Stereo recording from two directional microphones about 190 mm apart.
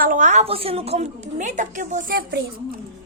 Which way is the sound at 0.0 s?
40° right (ahead or behind).